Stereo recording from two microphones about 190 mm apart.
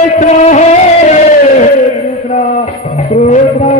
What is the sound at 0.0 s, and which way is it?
Chant, 40° left (ahead or behind).